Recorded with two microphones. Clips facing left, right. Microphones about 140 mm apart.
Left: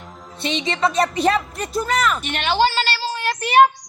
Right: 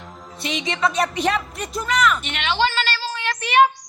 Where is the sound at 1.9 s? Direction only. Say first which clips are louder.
Right 3 dB; 35° left (ahead or behind).